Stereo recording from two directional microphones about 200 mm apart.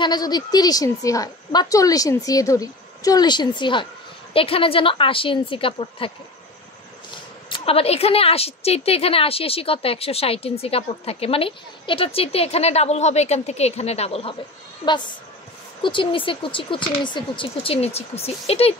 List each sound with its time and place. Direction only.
0.0 s a woman's voice: 20° left (ahead or behind)
7.4 s a woman's voice: 25° left (ahead or behind)
15.8 s a woman's voice: 25° left (ahead or behind)